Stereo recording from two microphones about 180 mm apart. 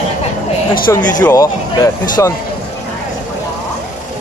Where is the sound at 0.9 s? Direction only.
15° left (ahead or behind).